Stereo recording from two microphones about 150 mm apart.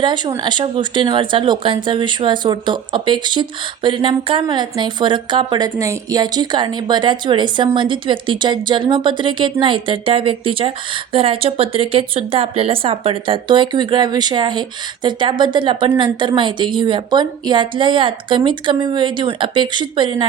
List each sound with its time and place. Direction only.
0.0 s a woman's voice: 30° right (ahead or behind)